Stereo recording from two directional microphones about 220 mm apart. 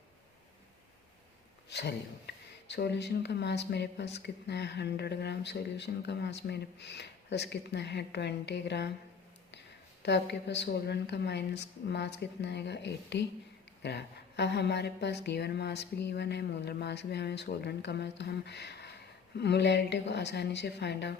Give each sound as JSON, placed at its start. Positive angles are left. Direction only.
{"t": 1.7, "sound": "speech", "side_deg": 50}
{"t": 10.0, "sound": "speech", "side_deg": 50}